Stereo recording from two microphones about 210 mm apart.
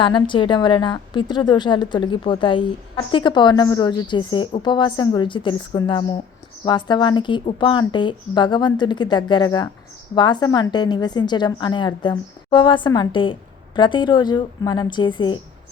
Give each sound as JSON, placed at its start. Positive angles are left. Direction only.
{"t": 0.0, "sound": "a woman's voice", "side_deg": 25}